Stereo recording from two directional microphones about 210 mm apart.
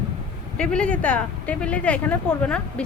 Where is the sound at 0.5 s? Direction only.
5° left (ahead or behind).